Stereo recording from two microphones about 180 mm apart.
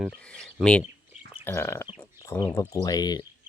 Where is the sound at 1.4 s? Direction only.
15° left (ahead or behind).